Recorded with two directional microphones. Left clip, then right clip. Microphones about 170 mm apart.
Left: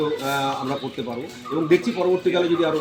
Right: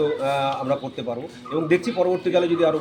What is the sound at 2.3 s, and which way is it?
Speech, 20° right (ahead or behind).